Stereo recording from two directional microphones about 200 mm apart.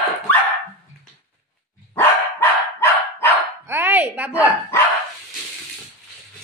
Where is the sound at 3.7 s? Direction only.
10° right (ahead or behind).